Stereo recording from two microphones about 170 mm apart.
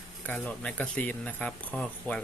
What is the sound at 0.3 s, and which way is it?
Speech, 10° left (ahead or behind).